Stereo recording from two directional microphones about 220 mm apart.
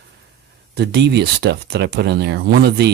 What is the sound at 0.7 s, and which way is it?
Speech, 50° right (ahead or behind).